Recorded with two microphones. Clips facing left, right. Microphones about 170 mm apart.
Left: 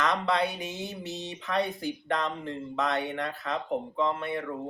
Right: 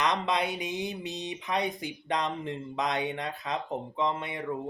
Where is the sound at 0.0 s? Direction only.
20° right (ahead or behind).